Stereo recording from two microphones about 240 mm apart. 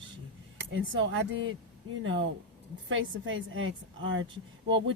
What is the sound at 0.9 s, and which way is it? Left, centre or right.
Speech, right.